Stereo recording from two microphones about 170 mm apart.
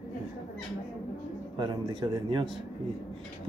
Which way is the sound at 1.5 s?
25° right (ahead or behind).